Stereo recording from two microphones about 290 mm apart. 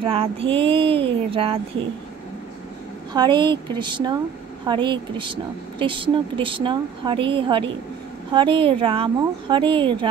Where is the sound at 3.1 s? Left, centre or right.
Centre.